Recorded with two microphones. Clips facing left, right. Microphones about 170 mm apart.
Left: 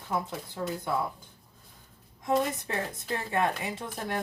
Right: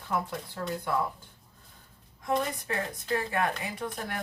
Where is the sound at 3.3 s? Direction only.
25° left (ahead or behind).